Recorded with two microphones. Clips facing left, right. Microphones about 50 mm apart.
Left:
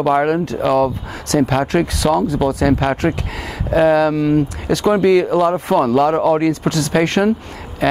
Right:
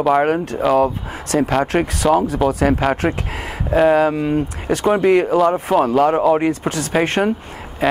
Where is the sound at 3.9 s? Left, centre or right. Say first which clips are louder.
Left 1 dB; right.